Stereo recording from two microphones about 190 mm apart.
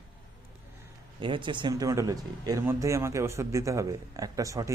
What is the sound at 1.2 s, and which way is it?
Speech, 25° right (ahead or behind).